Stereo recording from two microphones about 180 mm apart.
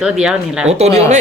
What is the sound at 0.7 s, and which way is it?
Speech, 35° right (ahead or behind).